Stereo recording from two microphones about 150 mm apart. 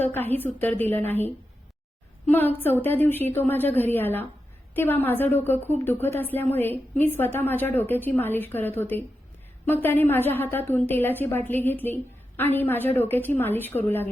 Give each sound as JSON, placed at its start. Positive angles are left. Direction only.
{"t": 0.0, "sound": "a woman's voice", "side_deg": 15}
{"t": 2.3, "sound": "a woman's voice", "side_deg": 15}